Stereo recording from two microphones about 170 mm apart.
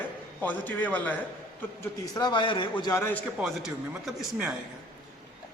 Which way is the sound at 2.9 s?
15° left (ahead or behind).